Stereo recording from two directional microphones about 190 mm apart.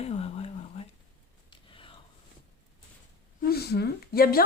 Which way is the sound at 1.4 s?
25° left (ahead or behind).